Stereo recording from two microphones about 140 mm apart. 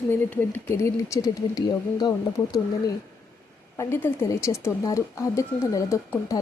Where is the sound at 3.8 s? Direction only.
15° left (ahead or behind).